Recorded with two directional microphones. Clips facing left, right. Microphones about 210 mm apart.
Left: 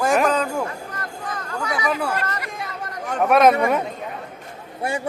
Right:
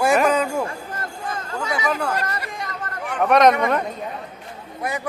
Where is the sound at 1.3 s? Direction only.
25° right (ahead or behind).